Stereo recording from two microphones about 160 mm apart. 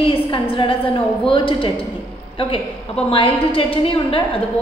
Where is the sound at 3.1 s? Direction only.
35° left (ahead or behind).